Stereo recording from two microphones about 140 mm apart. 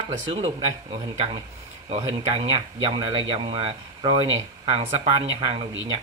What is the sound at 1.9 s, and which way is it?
Speech, 30° right (ahead or behind).